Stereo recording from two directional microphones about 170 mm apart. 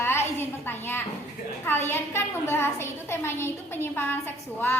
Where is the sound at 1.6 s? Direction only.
15° left (ahead or behind).